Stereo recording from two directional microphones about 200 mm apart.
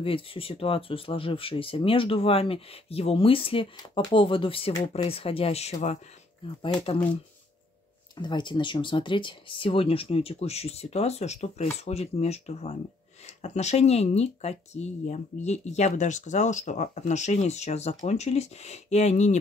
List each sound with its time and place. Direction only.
0.0 s speech: 25° left (ahead or behind)
8.2 s speech: 20° left (ahead or behind)